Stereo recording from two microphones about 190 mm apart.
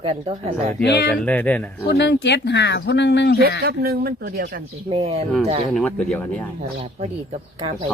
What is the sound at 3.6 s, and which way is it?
Speech, 55° right (ahead or behind).